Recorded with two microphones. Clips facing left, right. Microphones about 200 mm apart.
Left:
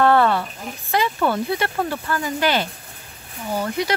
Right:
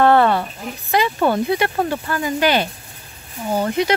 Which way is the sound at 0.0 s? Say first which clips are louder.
Right 2 dB; 25° right (ahead or behind).